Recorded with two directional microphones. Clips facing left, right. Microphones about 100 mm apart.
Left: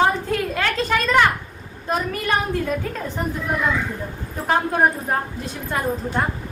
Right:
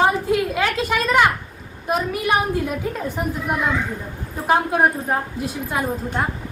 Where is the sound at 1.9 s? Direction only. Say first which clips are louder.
Right 2 dB; 15° right (ahead or behind).